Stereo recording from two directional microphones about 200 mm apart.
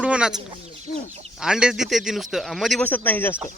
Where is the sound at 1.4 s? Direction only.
5° right (ahead or behind).